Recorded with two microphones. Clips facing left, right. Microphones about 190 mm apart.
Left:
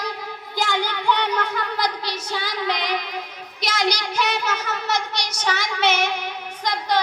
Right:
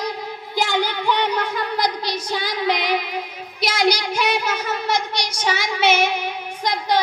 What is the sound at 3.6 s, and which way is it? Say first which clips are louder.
A child's voice: right 4 dB; 10° right (ahead or behind).